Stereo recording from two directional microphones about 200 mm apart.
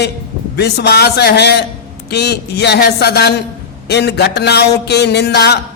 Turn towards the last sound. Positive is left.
turn(degrees=55)  # may be behind; listen again after turning